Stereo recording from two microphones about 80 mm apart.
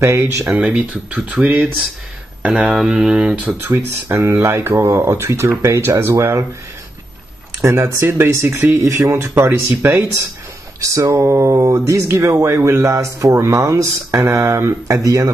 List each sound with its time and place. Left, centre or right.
0.0 s speech: right
0.6 s speech: centre
4.1 s speech: right
7.6 s speech: right